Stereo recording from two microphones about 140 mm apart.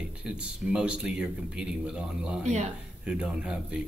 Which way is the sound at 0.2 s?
5° right (ahead or behind).